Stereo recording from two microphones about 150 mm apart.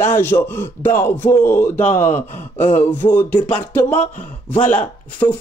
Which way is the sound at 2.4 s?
50° left (ahead or behind).